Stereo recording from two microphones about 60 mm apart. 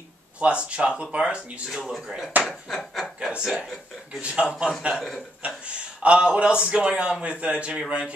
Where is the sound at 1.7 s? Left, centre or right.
Centre.